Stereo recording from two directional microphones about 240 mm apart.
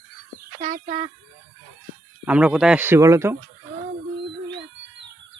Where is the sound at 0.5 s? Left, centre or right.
Right.